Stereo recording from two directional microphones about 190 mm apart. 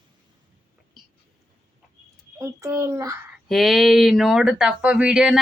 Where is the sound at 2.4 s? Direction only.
15° right (ahead or behind).